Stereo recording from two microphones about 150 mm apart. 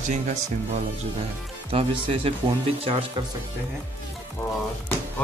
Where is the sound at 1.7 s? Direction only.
40° right (ahead or behind).